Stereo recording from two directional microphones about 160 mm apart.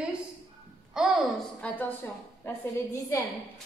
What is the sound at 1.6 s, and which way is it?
A woman's voice, 10° left (ahead or behind).